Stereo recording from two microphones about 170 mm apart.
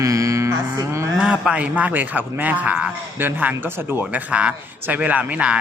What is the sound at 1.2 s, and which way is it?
Speech, 5° right (ahead or behind).